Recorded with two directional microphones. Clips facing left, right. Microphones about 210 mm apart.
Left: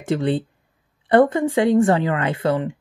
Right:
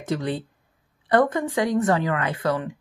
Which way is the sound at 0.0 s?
30° left (ahead or behind).